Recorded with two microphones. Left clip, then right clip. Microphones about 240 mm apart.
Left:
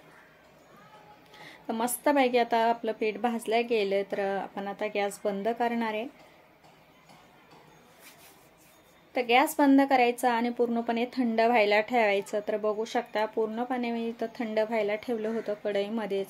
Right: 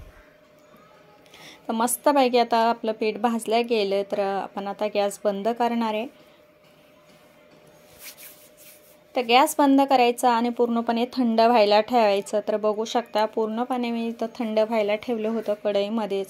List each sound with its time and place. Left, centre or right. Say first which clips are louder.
1.4 s a woman's voice: right 6 dB; right
9.1 s a woman's voice: right 5 dB; right